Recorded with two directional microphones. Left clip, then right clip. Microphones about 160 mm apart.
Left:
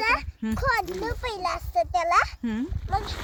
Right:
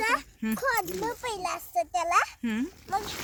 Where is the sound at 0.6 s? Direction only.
15° left (ahead or behind).